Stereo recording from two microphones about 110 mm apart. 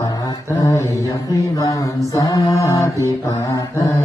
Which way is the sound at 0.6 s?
30° left (ahead or behind).